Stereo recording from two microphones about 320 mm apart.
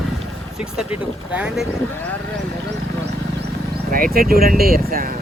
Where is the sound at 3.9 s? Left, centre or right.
Right.